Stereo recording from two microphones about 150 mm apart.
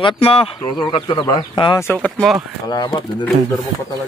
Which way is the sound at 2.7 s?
30° left (ahead or behind).